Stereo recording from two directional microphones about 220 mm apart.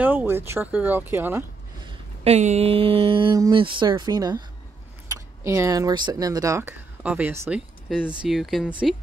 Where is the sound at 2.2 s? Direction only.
30° right (ahead or behind).